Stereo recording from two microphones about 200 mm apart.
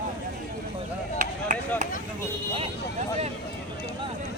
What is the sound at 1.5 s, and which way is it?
Chop, 40° right (ahead or behind).